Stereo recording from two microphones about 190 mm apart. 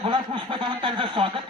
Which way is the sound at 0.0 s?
30° right (ahead or behind).